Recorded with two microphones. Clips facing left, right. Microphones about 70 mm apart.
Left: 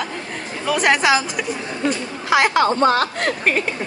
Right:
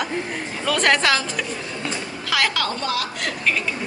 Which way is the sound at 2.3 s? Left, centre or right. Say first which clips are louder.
Left 7 dB; left.